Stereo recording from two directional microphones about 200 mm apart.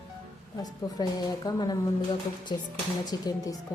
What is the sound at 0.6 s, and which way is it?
A woman's voice, 20° left (ahead or behind).